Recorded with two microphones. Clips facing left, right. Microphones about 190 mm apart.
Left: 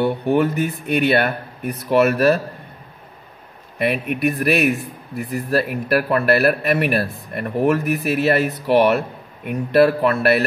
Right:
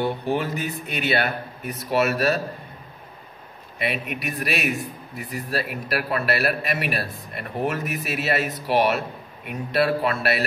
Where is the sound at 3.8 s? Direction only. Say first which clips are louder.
Left 8 dB; 55° left (ahead or behind).